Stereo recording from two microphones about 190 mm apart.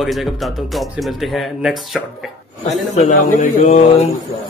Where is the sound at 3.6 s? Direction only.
35° left (ahead or behind).